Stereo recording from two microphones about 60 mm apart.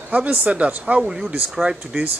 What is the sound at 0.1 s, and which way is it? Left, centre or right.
Speech, right.